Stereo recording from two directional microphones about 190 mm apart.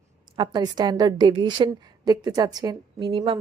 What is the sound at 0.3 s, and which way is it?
A woman's voice, 20° right (ahead or behind).